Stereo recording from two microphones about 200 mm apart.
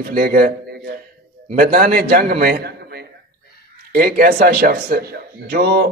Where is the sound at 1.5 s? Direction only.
45° right (ahead or behind).